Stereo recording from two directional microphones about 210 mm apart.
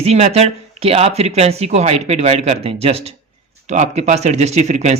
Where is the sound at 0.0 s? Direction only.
30° right (ahead or behind).